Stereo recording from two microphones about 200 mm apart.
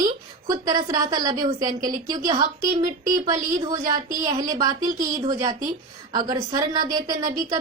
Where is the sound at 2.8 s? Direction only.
40° right (ahead or behind).